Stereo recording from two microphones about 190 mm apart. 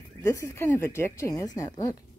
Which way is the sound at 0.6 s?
10° left (ahead or behind).